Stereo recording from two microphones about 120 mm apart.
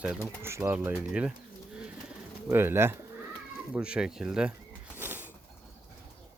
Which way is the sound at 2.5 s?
20° right (ahead or behind).